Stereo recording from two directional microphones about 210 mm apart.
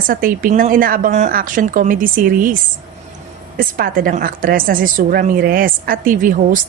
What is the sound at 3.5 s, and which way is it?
Speech, 45° right (ahead or behind).